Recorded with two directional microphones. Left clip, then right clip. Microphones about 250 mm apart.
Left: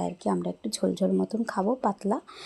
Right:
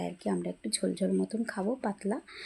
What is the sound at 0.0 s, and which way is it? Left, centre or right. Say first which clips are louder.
Speech: left 5 dB; centre.